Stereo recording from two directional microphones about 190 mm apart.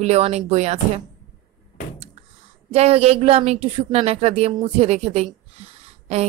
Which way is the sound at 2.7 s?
35° right (ahead or behind).